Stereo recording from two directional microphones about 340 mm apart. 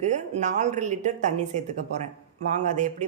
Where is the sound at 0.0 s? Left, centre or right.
Right.